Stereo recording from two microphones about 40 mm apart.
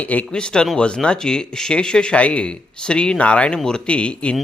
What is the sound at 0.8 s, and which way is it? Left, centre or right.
Speech, left.